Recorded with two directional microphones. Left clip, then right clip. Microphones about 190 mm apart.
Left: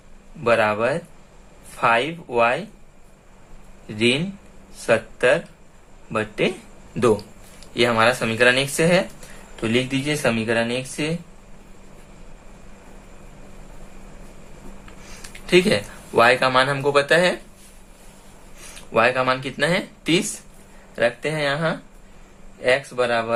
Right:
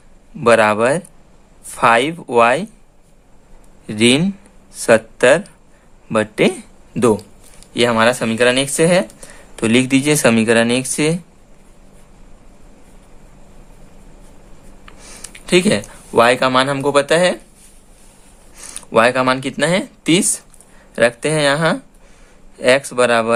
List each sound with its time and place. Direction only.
0.4 s speech: 45° right (ahead or behind)
3.8 s speech: 45° right (ahead or behind)
15.2 s speech: 45° right (ahead or behind)
18.9 s speech: 45° right (ahead or behind)